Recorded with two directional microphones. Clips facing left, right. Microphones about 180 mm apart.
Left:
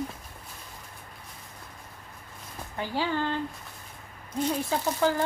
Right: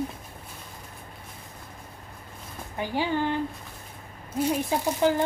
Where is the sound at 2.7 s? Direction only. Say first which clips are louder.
Right 2 dB; 15° right (ahead or behind).